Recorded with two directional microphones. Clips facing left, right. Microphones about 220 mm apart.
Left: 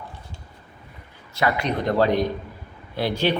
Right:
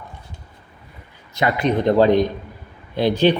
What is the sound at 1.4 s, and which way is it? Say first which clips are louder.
A man's voice: right 4 dB; 20° right (ahead or behind).